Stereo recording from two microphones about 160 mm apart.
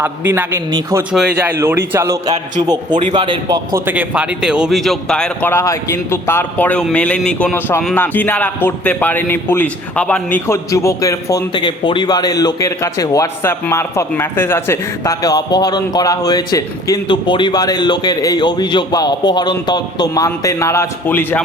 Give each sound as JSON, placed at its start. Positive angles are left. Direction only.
{"t": 0.0, "sound": "a man's voice", "side_deg": -15}
{"t": 1.1, "sound": "speech", "side_deg": 0}
{"t": 1.4, "sound": "a man's voice", "side_deg": -15}
{"t": 2.9, "sound": "speech", "side_deg": -40}
{"t": 3.8, "sound": "a man's voice", "side_deg": -10}